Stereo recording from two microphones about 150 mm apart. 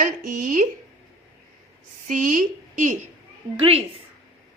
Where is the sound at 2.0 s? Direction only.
60° right (ahead or behind).